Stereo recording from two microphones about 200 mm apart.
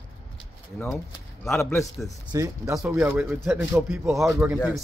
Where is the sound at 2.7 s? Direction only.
5° right (ahead or behind).